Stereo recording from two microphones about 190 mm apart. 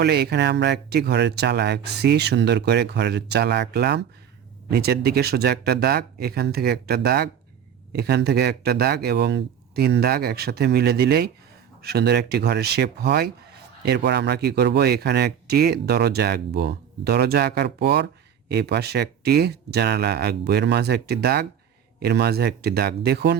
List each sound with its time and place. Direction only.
0.0 s speech: 60° right (ahead or behind)